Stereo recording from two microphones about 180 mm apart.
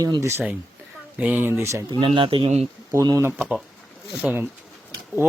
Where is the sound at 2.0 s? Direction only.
30° right (ahead or behind).